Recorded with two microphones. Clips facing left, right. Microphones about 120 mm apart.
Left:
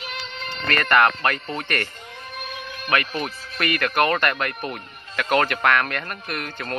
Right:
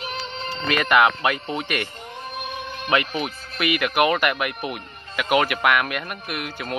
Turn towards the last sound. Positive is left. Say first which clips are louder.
# even
turn(degrees=-10)  # may be behind; listen again after turning